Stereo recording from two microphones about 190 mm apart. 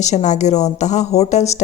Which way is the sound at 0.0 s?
40° left (ahead or behind).